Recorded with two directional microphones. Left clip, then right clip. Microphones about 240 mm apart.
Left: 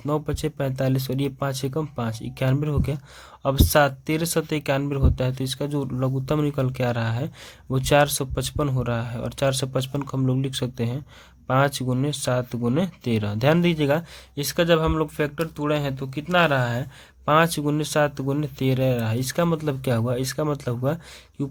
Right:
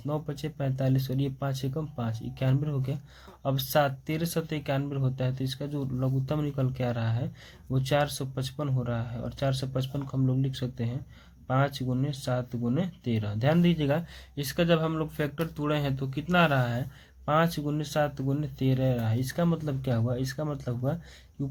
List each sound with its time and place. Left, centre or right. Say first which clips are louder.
0.0 s speech: left 8 dB; left